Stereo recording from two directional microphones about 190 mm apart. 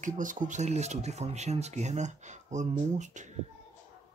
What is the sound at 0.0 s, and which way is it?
Speech, 45° right (ahead or behind).